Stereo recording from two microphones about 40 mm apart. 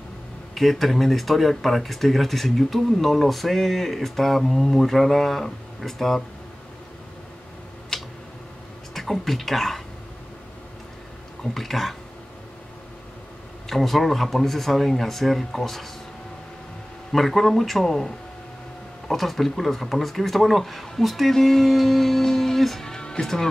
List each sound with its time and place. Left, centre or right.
0.6 s speech: centre
7.9 s tick: centre
8.9 s speech: centre
11.5 s speech: centre
13.7 s speech: centre
17.1 s speech: centre
22.8 s music: centre